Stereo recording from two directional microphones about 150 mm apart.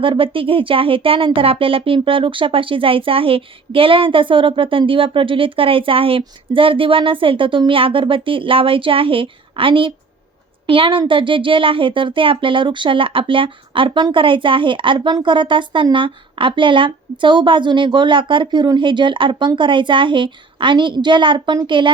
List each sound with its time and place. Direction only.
0.0 s speech: 35° right (ahead or behind)